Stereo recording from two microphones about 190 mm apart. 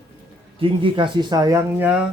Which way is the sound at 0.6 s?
25° right (ahead or behind).